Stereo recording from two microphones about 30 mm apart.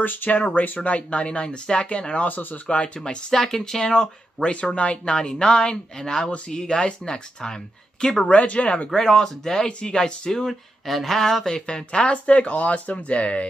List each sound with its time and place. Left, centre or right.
0.0 s speech: left
0.4 s speech: left
0.8 s speech: left
2.2 s speech: left
2.6 s speech: left
3.3 s speech: centre
4.4 s speech: left; by 6.8 s centre
8.3 s speech: left
8.9 s speech: left
9.7 s speech: left
9.9 s speech: left
10.9 s a sound: centre
11.1 s speech: centre; by 12.2 s left
12.3 s speech: left